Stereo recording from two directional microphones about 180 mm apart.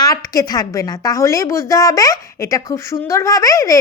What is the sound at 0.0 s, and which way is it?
A woman's voice, 20° left (ahead or behind).